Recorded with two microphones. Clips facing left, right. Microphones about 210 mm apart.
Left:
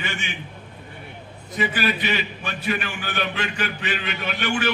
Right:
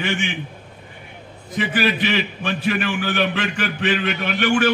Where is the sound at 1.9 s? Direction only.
50° right (ahead or behind).